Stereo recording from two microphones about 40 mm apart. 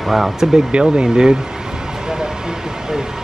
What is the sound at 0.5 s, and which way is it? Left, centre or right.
Speech, right.